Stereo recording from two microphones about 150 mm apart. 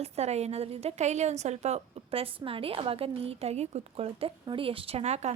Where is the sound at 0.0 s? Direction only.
45° right (ahead or behind).